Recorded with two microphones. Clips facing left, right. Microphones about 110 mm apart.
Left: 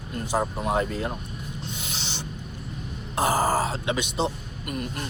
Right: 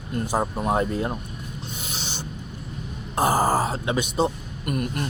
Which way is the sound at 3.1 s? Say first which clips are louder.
Right 2 dB; 40° right (ahead or behind).